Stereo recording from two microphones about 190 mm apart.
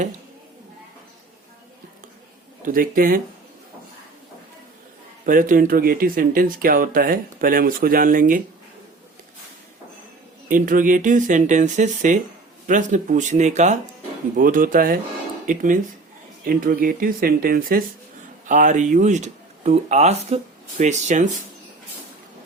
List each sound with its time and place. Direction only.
2.6 s speech: 45° right (ahead or behind)
5.2 s speech: 45° right (ahead or behind)
10.5 s speech: 45° right (ahead or behind)